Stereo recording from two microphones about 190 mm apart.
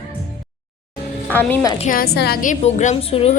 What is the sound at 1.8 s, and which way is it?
A woman's voice, 50° left (ahead or behind).